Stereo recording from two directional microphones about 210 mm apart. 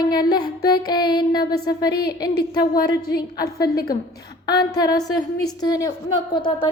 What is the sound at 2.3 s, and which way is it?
A woman's voice, 50° left (ahead or behind).